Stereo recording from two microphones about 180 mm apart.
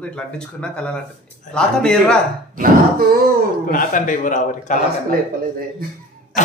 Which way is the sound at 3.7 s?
50° left (ahead or behind).